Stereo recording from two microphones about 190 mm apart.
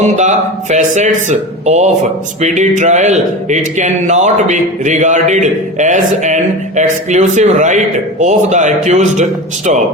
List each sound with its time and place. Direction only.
0.0 s speech: 40° right (ahead or behind)